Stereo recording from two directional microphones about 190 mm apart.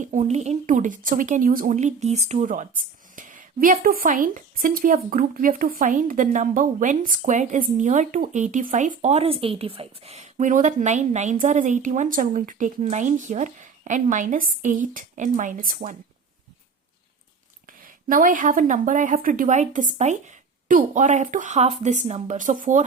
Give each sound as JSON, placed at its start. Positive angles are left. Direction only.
{"t": 0.0, "sound": "speech", "side_deg": -40}
{"t": 17.7, "sound": "speech", "side_deg": -45}